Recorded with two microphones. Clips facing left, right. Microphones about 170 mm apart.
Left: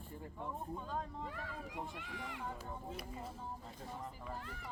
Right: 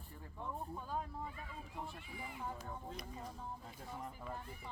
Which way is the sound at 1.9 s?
90° left.